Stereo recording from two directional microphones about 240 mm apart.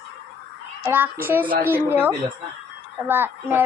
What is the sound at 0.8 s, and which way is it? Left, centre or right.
A woman's voice, centre.